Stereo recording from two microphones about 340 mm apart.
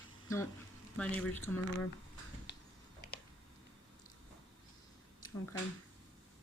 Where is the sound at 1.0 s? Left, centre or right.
Centre.